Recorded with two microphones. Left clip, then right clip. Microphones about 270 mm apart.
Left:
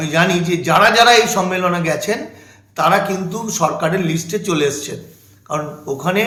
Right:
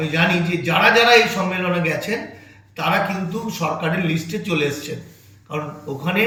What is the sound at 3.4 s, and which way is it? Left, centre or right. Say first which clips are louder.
A man's voice: left 6 dB; centre.